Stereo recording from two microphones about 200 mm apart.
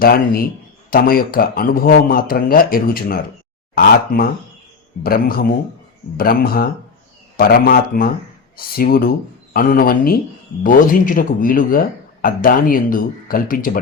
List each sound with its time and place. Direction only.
0.0 s speech: 50° left (ahead or behind)